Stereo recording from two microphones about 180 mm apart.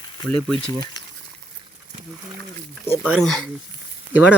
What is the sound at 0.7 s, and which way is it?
Speech, 25° left (ahead or behind).